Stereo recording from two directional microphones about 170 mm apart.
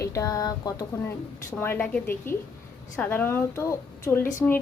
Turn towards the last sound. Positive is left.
turn(degrees=10)  # may be behind; listen again after turning